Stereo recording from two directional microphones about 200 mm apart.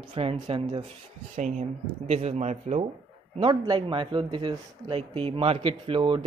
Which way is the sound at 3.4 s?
25° right (ahead or behind).